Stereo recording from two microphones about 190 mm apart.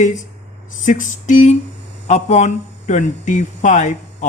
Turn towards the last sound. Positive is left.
turn(degrees=40)  # may be behind; listen again after turning